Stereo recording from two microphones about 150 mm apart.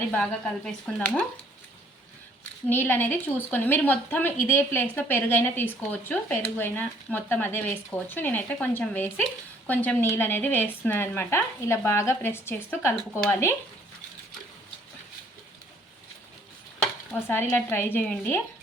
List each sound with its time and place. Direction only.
0.1 s speech: 5° left (ahead or behind)
2.6 s speech: 10° left (ahead or behind)
17.1 s speech: 15° left (ahead or behind)